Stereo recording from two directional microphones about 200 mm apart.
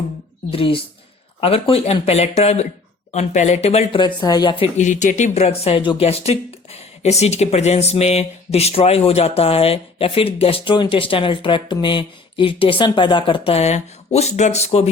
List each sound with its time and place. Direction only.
0.5 s speech: 25° left (ahead or behind)